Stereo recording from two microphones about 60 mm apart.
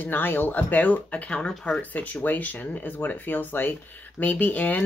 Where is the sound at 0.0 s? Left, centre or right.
Left.